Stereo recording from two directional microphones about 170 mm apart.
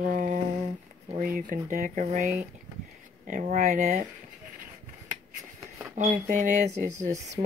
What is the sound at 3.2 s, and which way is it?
Speech, 50° right (ahead or behind).